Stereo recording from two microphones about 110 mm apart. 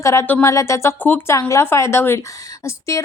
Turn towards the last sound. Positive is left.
turn(degrees=30)  # may be behind; listen again after turning